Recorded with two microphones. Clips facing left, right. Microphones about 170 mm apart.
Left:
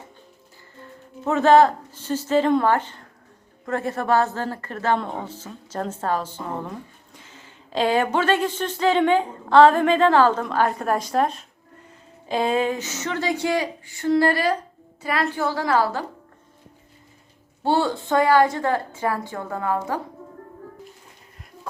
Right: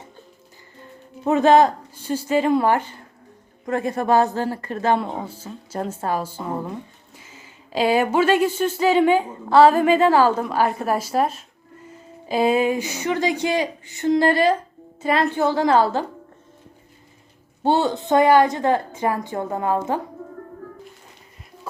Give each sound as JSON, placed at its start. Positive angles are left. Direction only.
{"t": 1.2, "sound": "a woman's voice", "side_deg": -15}
{"t": 17.6, "sound": "a woman's voice", "side_deg": -20}